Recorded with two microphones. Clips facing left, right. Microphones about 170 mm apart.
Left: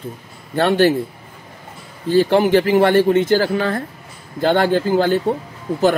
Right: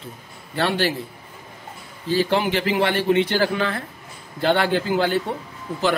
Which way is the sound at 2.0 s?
50° left (ahead or behind).